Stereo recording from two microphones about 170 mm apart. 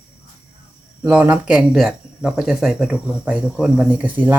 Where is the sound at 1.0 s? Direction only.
10° right (ahead or behind).